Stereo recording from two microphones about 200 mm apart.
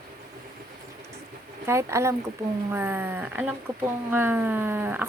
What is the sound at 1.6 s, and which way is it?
Speech, 15° right (ahead or behind).